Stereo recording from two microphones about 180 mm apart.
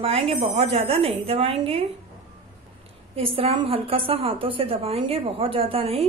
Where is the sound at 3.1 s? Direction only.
30° right (ahead or behind).